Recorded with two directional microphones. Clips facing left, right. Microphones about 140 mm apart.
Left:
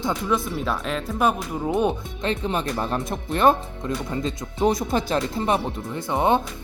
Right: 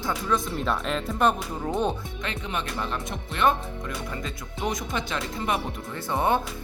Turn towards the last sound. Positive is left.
turn(degrees=20)  # may be behind; listen again after turning